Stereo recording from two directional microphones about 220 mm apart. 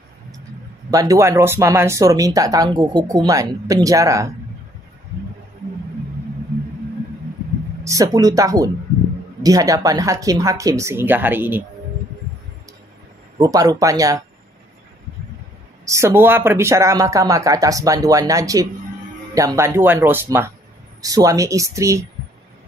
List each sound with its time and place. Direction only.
0.8 s speech: 15° right (ahead or behind)
7.8 s speech: 15° right (ahead or behind)
13.4 s speech: 15° right (ahead or behind)
15.8 s speech: 15° right (ahead or behind)